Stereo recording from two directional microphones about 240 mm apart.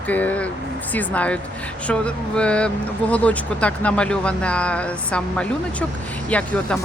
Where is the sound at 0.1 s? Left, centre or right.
Centre.